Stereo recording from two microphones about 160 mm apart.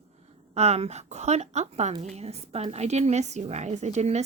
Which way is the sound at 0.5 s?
40° right (ahead or behind).